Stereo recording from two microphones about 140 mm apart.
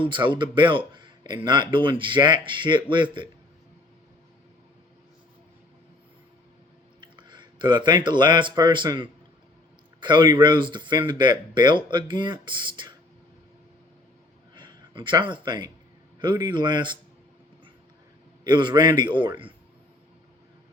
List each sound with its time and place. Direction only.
0.0 s speech: 35° right (ahead or behind)
7.0 s speech: 35° right (ahead or behind)
14.5 s speech: 35° right (ahead or behind)
18.4 s speech: 35° right (ahead or behind)